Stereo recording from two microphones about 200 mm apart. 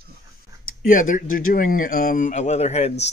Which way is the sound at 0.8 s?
40° left (ahead or behind).